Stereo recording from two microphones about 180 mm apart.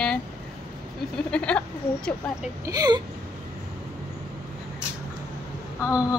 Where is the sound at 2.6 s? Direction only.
20° right (ahead or behind).